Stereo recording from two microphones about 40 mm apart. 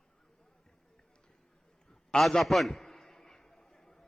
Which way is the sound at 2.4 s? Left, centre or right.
Centre.